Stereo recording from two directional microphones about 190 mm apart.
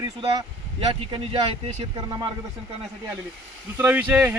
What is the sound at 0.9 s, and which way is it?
Speech, 25° right (ahead or behind).